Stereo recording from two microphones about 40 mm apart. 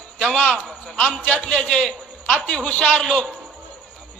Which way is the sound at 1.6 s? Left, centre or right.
Left.